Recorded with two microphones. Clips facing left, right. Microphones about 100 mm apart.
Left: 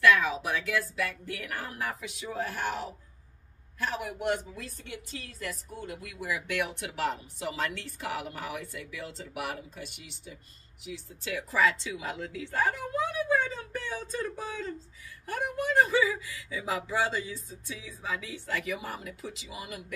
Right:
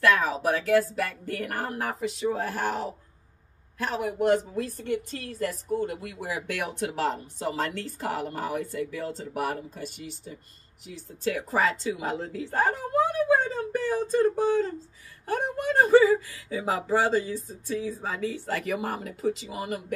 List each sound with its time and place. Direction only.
0.0 s a woman's voice: 40° right (ahead or behind)